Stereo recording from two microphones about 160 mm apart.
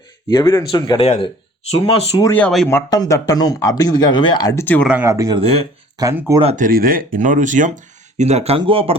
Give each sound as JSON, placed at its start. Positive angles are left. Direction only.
{"t": 0.3, "sound": "speech", "side_deg": 25}
{"t": 2.3, "sound": "speech", "side_deg": 5}
{"t": 2.6, "sound": "speech", "side_deg": 20}
{"t": 4.6, "sound": "speech", "side_deg": 10}
{"t": 4.9, "sound": "speech", "side_deg": -15}
{"t": 5.4, "sound": "speech", "side_deg": -40}
{"t": 6.0, "sound": "speech", "side_deg": -20}
{"t": 6.6, "sound": "speech", "side_deg": -65}